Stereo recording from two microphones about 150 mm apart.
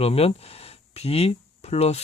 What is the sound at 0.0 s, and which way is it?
Speech, 40° left (ahead or behind).